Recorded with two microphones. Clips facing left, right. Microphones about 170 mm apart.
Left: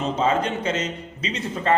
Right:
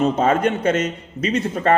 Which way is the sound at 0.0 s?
50° right (ahead or behind).